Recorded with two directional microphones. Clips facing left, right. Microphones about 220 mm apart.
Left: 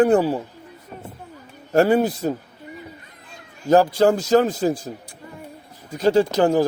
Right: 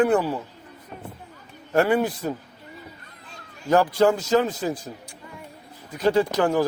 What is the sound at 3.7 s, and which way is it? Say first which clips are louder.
A man's voice: left 3 dB; 35° left (ahead or behind).